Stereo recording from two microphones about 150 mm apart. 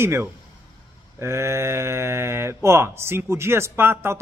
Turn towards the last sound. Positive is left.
turn(degrees=-15)  # may be behind; listen again after turning